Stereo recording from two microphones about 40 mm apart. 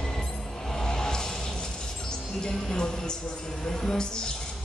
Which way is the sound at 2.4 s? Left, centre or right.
Centre.